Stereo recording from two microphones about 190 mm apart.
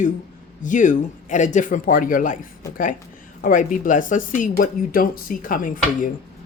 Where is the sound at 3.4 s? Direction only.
45° left (ahead or behind).